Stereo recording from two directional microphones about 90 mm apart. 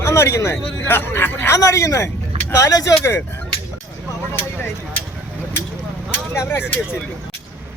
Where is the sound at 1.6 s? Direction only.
35° left (ahead or behind).